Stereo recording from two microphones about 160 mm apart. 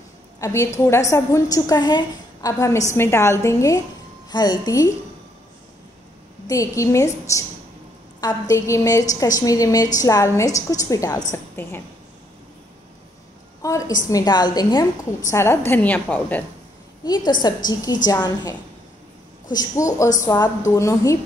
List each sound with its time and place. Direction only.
0.4 s a woman's voice: 20° left (ahead or behind)
6.4 s a woman's voice: 20° left (ahead or behind)
13.6 s a woman's voice: 20° left (ahead or behind)
17.0 s a woman's voice: 25° left (ahead or behind)